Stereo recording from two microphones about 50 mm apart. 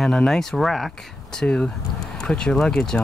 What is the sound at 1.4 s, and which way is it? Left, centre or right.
Speech, centre.